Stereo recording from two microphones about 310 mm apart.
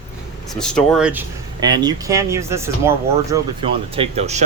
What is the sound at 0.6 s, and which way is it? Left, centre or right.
Speech, centre.